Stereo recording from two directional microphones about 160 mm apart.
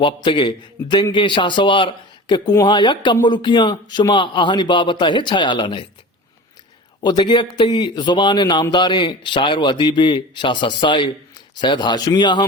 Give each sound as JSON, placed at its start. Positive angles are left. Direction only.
{"t": 0.0, "sound": "a man's voice", "side_deg": 30}
{"t": 7.0, "sound": "a man's voice", "side_deg": 25}